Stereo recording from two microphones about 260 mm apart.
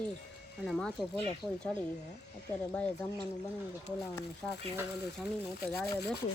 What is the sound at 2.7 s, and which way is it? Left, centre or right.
Speech, centre.